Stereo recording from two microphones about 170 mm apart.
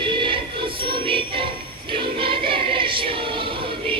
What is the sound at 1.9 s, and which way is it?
Choir, 30° right (ahead or behind).